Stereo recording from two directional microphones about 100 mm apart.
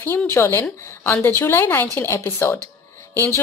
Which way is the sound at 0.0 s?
25° left (ahead or behind).